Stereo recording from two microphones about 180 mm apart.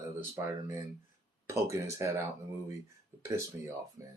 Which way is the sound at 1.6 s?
15° right (ahead or behind).